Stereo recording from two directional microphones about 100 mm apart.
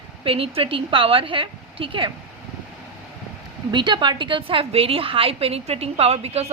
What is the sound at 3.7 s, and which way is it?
A woman's voice, 50° right (ahead or behind).